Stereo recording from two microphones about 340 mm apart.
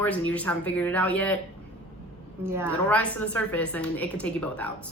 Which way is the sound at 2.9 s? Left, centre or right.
Centre.